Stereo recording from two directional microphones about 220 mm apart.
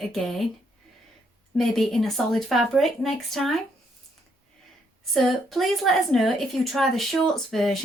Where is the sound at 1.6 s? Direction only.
Centre (ahead or behind).